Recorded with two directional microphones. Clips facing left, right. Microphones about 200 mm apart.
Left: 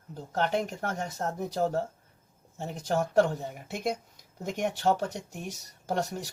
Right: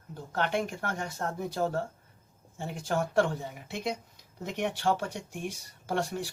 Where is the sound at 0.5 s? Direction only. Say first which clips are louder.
Left 1 dB; 40° left (ahead or behind).